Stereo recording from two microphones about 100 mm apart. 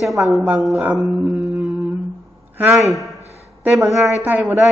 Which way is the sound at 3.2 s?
90° right.